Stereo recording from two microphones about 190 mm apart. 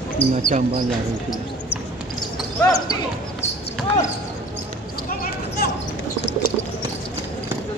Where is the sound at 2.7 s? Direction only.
20° left (ahead or behind).